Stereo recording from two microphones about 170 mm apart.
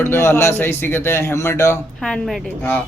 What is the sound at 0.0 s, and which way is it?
Speech, 15° left (ahead or behind).